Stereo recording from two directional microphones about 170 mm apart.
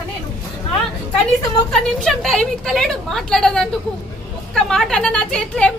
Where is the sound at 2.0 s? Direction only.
Centre (ahead or behind).